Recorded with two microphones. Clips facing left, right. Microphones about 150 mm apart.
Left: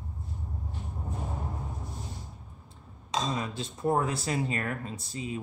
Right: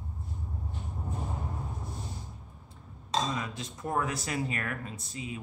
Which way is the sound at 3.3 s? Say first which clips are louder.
Left 2 dB; 30° left (ahead or behind).